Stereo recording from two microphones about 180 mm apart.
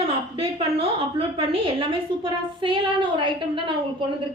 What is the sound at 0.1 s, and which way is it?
A woman's voice, 30° right (ahead or behind).